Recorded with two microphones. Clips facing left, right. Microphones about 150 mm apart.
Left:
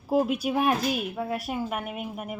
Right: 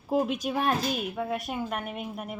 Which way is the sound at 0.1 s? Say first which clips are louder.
Left 3 dB; 5° left (ahead or behind).